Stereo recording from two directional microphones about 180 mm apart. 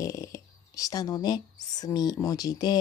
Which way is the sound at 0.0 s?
20° left (ahead or behind).